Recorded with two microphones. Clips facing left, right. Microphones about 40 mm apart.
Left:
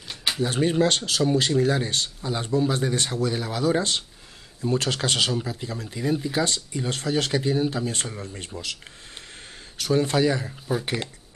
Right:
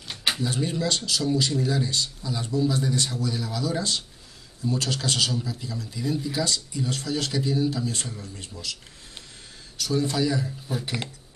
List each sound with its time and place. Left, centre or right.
0.4 s speech: left
9.8 s speech: left